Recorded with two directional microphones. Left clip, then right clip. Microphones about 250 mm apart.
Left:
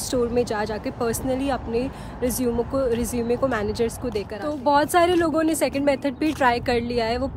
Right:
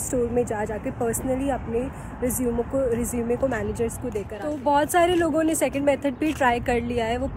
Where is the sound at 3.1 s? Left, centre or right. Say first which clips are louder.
Left 2 dB; centre.